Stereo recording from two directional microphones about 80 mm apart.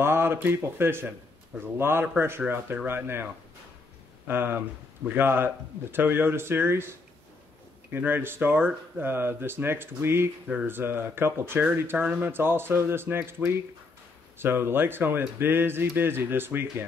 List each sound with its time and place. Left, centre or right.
0.0 s speech: right
4.3 s speech: right
14.4 s speech: right